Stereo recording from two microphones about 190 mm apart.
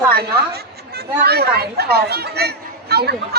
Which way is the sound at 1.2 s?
55° right (ahead or behind).